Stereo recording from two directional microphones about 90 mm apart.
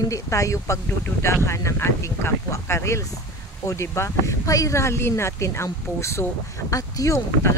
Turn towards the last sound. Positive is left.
turn(degrees=35)  # may be behind; listen again after turning